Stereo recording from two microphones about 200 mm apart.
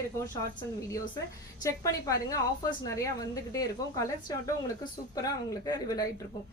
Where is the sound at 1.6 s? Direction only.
15° left (ahead or behind).